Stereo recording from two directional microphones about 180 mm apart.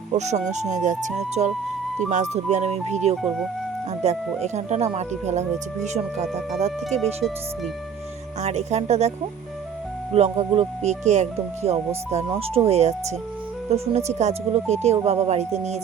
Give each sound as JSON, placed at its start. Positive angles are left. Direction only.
{"t": 0.1, "sound": "speech", "side_deg": -40}
{"t": 3.2, "sound": "speech", "side_deg": 0}
{"t": 4.0, "sound": "speech", "side_deg": -40}
{"t": 7.0, "sound": "speech", "side_deg": 0}
{"t": 8.4, "sound": "speech", "side_deg": -40}
{"t": 10.2, "sound": "speech", "side_deg": -35}